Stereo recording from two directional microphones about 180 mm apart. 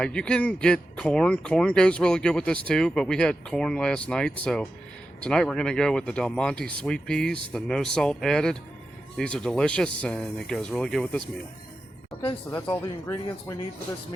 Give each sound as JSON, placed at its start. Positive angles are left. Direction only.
{"t": 0.0, "sound": "speech", "side_deg": 5}
{"t": 12.2, "sound": "speech", "side_deg": 25}
{"t": 12.5, "sound": "speech", "side_deg": 15}